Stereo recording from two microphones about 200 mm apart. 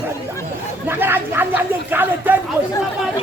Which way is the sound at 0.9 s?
10° right (ahead or behind).